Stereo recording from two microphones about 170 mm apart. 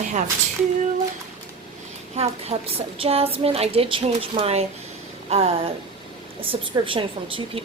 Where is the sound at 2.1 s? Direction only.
40° right (ahead or behind).